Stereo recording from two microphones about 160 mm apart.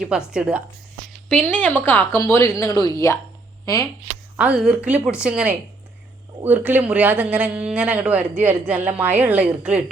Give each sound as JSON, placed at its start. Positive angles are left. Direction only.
{"t": 0.3, "sound": "speech", "side_deg": -5}
{"t": 1.3, "sound": "a woman's voice", "side_deg": 5}
{"t": 4.4, "sound": "a man's voice", "side_deg": -5}